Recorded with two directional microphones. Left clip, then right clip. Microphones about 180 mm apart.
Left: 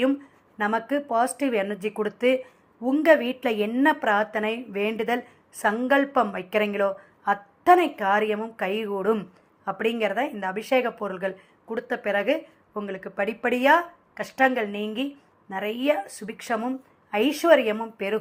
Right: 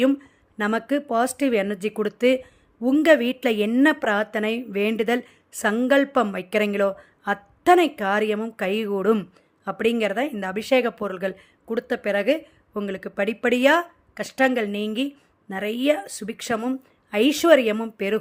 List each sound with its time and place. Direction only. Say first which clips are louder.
0.6 s a woman's voice: right 1 dB; 40° right (ahead or behind)